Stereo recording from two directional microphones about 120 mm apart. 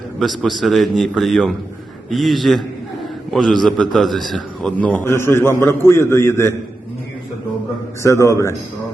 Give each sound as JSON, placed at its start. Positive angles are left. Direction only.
{"t": 0.2, "sound": "a man's voice", "side_deg": 0}
{"t": 4.8, "sound": "a man's voice", "side_deg": 15}
{"t": 8.0, "sound": "a man's voice", "side_deg": 25}